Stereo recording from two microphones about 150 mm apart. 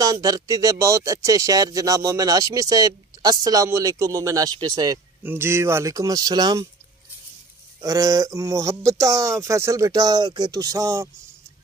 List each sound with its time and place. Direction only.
0.0 s speech: 25° right (ahead or behind)
7.8 s speech: 25° right (ahead or behind)